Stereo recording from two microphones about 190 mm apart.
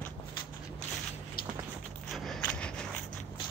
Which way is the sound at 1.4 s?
50° left (ahead or behind).